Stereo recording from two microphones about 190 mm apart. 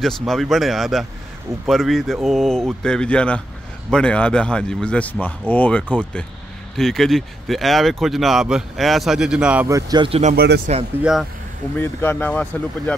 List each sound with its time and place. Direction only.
0.0 s speech: centre (ahead or behind); by 10.3 s 30° right (ahead or behind)
10.3 s speech: 55° right (ahead or behind)
11.0 s speech: 5° right (ahead or behind)
11.7 s speech: 10° left (ahead or behind)